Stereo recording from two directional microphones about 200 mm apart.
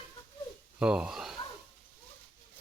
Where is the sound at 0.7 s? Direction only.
5° right (ahead or behind).